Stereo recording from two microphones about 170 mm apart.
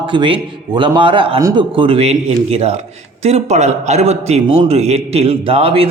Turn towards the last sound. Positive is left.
turn(degrees=-35)  # may be behind; listen again after turning